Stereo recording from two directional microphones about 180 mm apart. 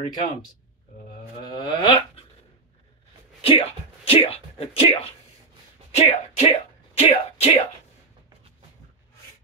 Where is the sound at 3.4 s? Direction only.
35° left (ahead or behind).